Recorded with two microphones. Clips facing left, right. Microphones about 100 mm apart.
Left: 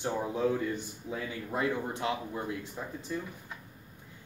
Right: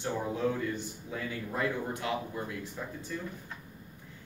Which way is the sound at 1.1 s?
20° left (ahead or behind).